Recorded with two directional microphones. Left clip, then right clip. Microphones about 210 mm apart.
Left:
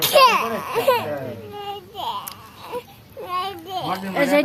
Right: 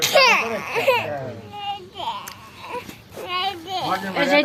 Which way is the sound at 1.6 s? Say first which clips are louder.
Right 1 dB; 20° left (ahead or behind).